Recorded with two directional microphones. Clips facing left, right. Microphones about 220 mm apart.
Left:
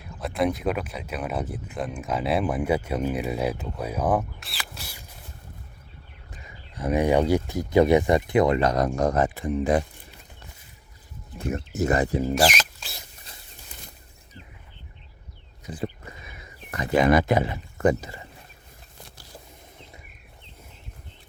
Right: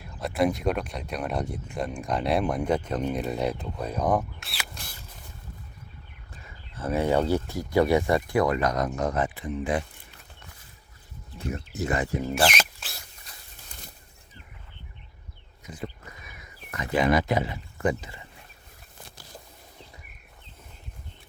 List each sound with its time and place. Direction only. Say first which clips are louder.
0.0 s speech: even; centre (ahead or behind)
6.3 s speech: left 2 dB; 15° left (ahead or behind); by 9.8 s 45° left (ahead or behind)
11.3 s speech: left 5 dB; 50° left (ahead or behind)
15.6 s a sound: left 5 dB; 30° left (ahead or behind)
17.0 s speech: left 3 dB; 50° left (ahead or behind)